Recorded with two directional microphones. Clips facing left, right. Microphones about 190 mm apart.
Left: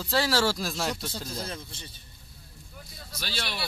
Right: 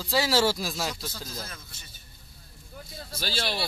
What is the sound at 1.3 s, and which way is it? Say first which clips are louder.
Speech: left 5 dB; 30° left (ahead or behind).